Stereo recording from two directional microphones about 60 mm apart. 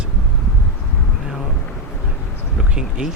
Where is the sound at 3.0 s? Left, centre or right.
Centre.